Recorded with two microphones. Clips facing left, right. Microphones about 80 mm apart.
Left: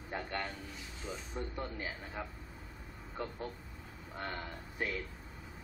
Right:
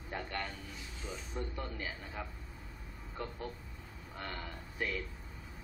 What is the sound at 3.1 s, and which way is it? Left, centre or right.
Speech, centre.